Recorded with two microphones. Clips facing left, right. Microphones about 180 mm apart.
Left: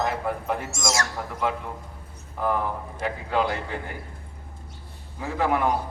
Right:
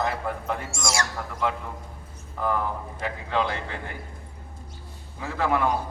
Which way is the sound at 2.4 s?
5° left (ahead or behind).